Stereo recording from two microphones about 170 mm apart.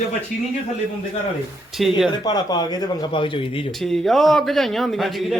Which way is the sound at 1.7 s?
Centre (ahead or behind).